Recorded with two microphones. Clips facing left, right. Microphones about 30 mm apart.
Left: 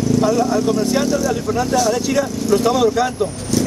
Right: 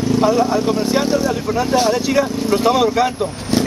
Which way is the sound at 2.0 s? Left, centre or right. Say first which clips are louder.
Right 2 dB; right.